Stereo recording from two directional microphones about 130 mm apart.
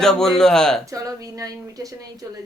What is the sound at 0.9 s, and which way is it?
Speech, 25° right (ahead or behind).